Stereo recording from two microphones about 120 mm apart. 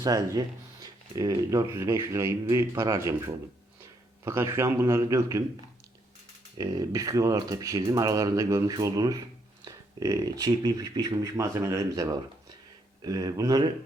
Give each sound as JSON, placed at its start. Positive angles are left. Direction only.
{"t": 0.0, "sound": "speech", "side_deg": -30}
{"t": 6.6, "sound": "speech", "side_deg": -30}